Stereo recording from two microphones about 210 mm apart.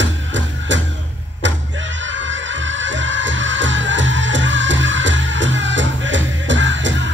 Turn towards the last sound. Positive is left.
turn(degrees=-60)  # may be behind; listen again after turning